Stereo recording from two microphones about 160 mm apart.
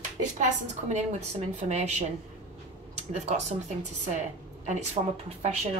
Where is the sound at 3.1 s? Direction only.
45° right (ahead or behind).